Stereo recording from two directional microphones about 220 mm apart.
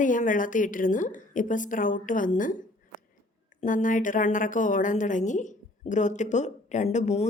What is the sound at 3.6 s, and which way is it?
Speech, 35° left (ahead or behind).